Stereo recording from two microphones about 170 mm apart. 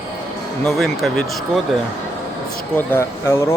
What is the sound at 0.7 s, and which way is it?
Speech, centre (ahead or behind).